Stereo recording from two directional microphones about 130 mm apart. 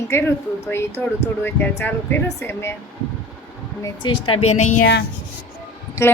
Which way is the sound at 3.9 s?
40° left (ahead or behind).